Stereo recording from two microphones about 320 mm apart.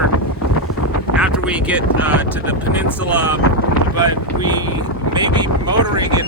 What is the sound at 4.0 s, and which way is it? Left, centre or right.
Speech, centre.